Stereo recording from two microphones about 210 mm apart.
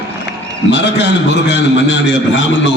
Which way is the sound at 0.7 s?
55° left (ahead or behind).